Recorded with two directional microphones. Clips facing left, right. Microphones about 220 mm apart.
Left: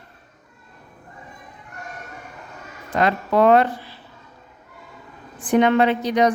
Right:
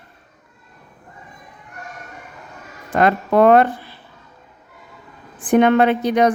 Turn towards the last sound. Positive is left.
turn(degrees=-55)  # may be behind; listen again after turning